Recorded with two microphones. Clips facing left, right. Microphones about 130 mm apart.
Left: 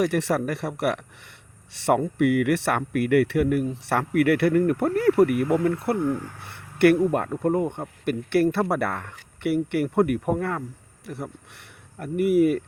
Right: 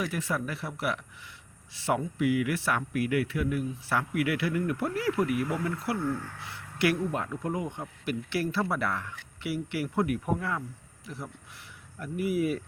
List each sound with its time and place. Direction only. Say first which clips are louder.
0.0 s speech: left 9 dB; 75° left (ahead or behind); by 6.0 s 55° left (ahead or behind)
6.0 s speech: left 6 dB; 15° left (ahead or behind)
6.5 s a sound: left 10 dB; 60° left (ahead or behind)
7.3 s speech: left 9 dB; 40° left (ahead or behind)
7.7 s speech: left 6 dB; 55° left (ahead or behind)